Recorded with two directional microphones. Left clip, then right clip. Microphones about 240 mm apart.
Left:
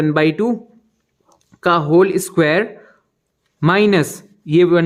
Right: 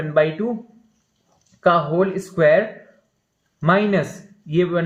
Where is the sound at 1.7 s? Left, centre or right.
Left.